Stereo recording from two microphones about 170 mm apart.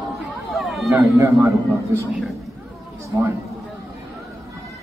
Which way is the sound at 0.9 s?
20° right (ahead or behind).